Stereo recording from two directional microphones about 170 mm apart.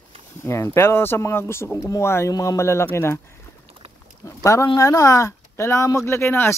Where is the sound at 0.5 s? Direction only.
15° left (ahead or behind).